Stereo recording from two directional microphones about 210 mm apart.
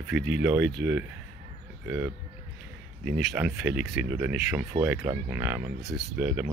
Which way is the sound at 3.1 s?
5° right (ahead or behind).